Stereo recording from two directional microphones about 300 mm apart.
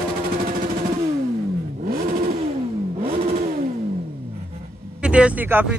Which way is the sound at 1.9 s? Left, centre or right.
Right.